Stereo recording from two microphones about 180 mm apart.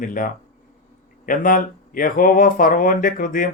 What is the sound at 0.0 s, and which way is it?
Speech, 50° left (ahead or behind).